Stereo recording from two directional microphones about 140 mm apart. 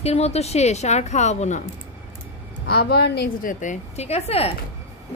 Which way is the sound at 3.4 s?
65° left (ahead or behind).